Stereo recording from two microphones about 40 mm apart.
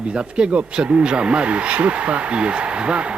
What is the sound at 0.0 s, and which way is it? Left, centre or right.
Speech, right.